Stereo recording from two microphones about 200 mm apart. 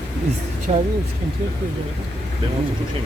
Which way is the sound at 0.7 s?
30° right (ahead or behind).